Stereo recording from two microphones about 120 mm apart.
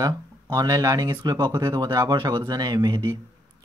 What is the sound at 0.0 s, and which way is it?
Speech, 30° right (ahead or behind).